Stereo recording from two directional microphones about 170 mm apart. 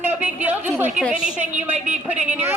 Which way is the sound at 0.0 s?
10° right (ahead or behind).